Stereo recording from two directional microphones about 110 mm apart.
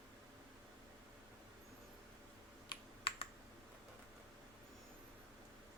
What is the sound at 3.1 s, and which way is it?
Computer keyboard, 60° left (ahead or behind).